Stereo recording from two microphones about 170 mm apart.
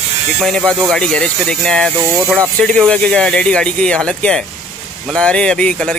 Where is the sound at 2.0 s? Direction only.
15° right (ahead or behind).